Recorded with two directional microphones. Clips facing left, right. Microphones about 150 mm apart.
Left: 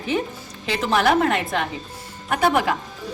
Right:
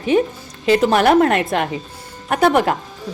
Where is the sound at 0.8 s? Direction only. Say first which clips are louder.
Right 3 dB; 55° right (ahead or behind).